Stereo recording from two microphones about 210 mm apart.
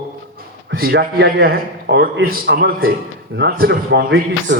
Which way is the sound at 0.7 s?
50° right (ahead or behind).